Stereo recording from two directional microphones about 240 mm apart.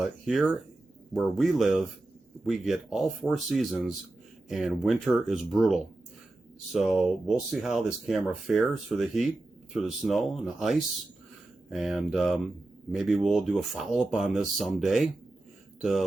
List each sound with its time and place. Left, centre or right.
0.0 s speech: centre